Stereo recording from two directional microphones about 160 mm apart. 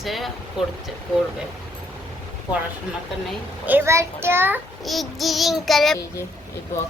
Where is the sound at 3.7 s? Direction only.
15° right (ahead or behind).